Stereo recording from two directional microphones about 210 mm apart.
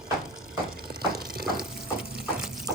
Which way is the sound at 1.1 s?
45° right (ahead or behind).